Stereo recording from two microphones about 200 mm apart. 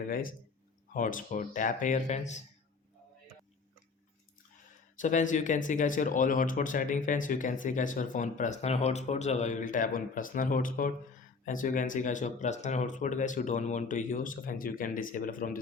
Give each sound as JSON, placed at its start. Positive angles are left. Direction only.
{"t": 0.1, "sound": "speech", "side_deg": 45}
{"t": 4.9, "sound": "speech", "side_deg": 40}